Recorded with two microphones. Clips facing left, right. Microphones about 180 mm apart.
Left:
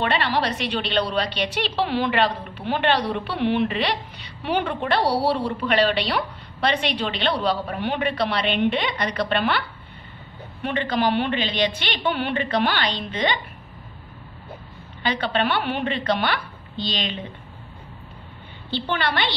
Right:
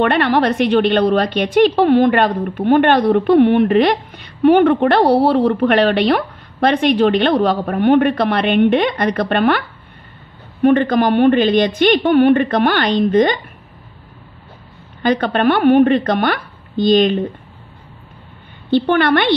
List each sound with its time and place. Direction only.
0.0 s a woman's voice: 55° right (ahead or behind)
15.0 s a woman's voice: 50° right (ahead or behind)
18.7 s a woman's voice: 55° right (ahead or behind)